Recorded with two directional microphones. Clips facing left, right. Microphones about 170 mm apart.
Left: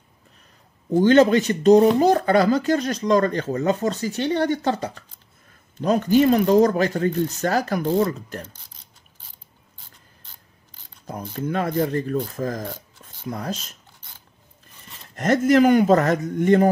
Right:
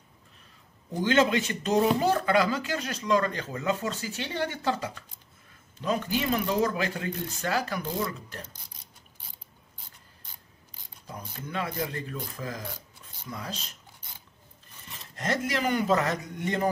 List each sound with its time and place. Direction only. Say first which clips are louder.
1.0 s speech: left 8 dB; 40° left (ahead or behind)
11.1 s speech: left 12 dB; 50° left (ahead or behind)
15.1 s speech: left 13 dB; 50° left (ahead or behind)